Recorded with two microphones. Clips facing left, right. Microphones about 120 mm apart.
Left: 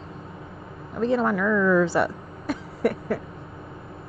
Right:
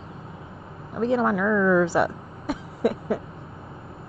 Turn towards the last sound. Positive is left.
turn(degrees=-10)  # may be behind; listen again after turning